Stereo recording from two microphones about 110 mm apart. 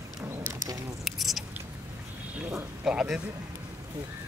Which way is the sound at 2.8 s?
10° right (ahead or behind).